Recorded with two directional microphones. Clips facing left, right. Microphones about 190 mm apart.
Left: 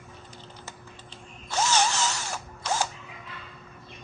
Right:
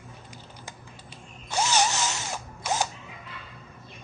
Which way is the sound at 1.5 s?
15° right (ahead or behind).